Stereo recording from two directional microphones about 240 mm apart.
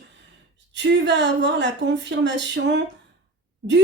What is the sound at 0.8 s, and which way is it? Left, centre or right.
Speech, right.